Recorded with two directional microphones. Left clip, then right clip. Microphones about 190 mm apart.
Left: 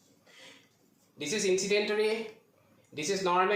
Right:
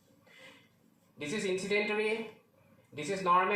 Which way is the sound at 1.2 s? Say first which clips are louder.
Left 5 dB; 25° left (ahead or behind).